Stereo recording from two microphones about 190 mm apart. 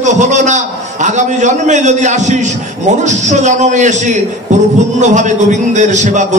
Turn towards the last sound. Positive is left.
turn(degrees=-40)  # may be behind; listen again after turning